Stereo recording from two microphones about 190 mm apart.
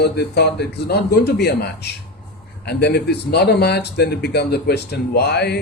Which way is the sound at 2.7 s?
60° left (ahead or behind).